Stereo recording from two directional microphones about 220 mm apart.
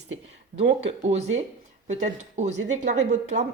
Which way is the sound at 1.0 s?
30° right (ahead or behind).